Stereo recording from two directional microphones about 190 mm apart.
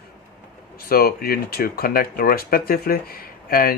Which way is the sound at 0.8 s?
55° left (ahead or behind).